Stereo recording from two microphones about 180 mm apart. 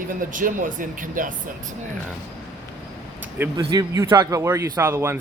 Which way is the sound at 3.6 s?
20° right (ahead or behind).